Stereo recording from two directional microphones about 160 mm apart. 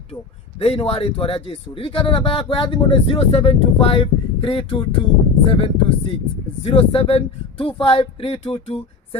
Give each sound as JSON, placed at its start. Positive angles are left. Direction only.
{"t": 0.6, "sound": "speech", "side_deg": 40}